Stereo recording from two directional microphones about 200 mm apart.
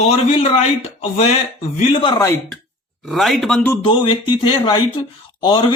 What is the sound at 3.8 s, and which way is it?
Speech, 25° left (ahead or behind).